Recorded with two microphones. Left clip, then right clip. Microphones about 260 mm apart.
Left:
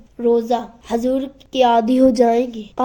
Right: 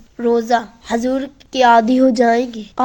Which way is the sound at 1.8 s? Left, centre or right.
Centre.